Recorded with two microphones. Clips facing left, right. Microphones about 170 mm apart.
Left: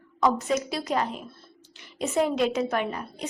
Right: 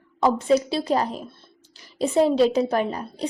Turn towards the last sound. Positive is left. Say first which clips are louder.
# right 5 dB
turn(degrees=-35)  # may be behind; listen again after turning